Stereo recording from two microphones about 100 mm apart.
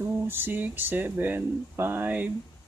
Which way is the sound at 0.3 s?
20° right (ahead or behind).